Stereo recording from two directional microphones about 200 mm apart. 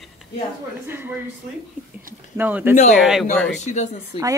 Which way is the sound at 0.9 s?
10° right (ahead or behind).